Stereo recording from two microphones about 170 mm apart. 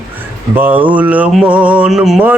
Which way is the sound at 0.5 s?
10° right (ahead or behind).